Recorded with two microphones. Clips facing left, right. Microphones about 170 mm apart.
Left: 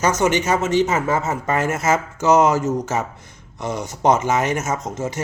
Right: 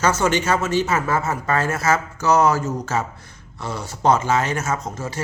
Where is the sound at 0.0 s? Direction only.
15° left (ahead or behind).